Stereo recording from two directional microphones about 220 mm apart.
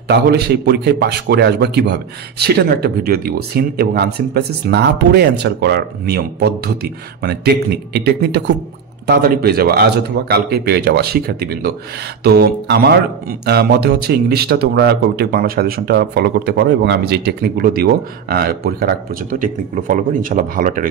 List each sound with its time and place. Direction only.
0.1 s speech: 45° right (ahead or behind)